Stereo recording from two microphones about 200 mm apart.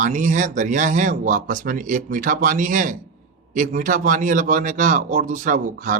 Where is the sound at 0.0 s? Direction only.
40° right (ahead or behind).